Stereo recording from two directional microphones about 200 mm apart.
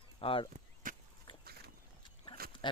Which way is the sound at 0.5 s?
40° right (ahead or behind).